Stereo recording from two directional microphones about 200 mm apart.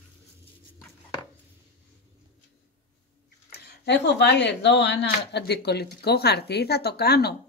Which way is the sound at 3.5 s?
55° left (ahead or behind).